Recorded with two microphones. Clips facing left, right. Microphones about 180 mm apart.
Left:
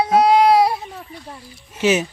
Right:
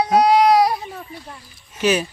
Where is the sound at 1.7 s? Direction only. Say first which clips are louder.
Left 1 dB; 25° left (ahead or behind).